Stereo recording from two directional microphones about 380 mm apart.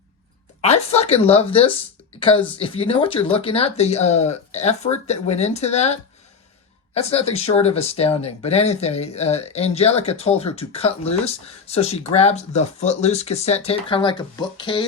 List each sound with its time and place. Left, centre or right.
0.6 s speech: centre